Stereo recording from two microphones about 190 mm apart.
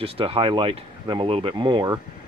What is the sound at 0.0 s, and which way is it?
Speech, 30° right (ahead or behind).